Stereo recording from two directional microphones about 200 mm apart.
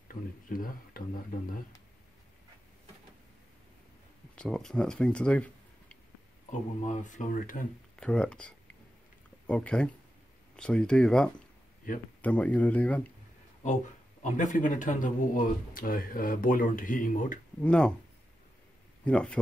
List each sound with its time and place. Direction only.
0.1 s a sound: 45° left (ahead or behind)
4.4 s speech: centre (ahead or behind)
6.9 s speech: 40° left (ahead or behind)
7.9 s speech: 5° left (ahead or behind)
14.2 s speech: 40° left (ahead or behind)
17.6 s speech: 5° left (ahead or behind)
19.0 s speech: 5° left (ahead or behind)